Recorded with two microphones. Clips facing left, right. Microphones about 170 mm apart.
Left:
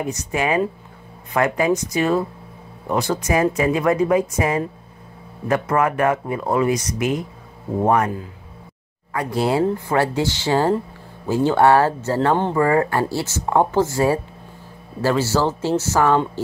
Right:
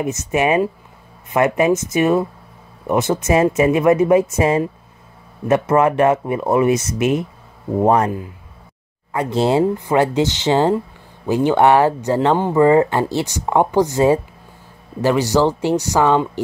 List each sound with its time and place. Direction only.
0.0 s speech: 20° right (ahead or behind)
9.1 s speech: 25° right (ahead or behind)